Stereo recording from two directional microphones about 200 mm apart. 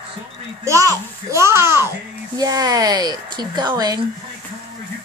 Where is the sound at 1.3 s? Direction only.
15° right (ahead or behind).